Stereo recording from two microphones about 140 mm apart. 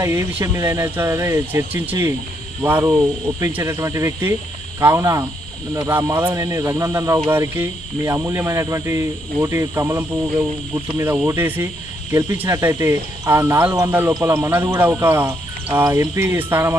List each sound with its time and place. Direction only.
0.0 s speech: 20° right (ahead or behind)